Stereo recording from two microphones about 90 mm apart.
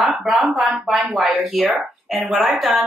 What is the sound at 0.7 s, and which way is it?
A woman's voice, 5° right (ahead or behind).